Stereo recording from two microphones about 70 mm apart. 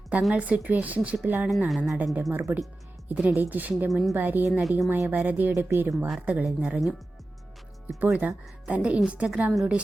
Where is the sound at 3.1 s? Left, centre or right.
Right.